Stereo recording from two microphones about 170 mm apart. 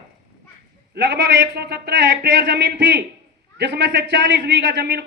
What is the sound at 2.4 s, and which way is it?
Speech, 90° right.